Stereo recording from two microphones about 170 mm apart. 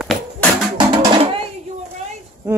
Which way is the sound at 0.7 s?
30° right (ahead or behind).